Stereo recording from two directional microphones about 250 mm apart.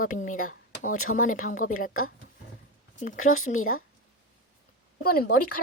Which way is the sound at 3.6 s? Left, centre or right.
Left.